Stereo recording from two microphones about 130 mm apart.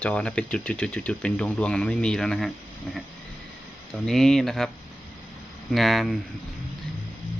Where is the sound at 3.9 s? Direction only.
5° left (ahead or behind).